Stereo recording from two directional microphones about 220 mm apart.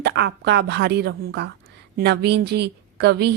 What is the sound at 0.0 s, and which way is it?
A woman's voice, 50° right (ahead or behind).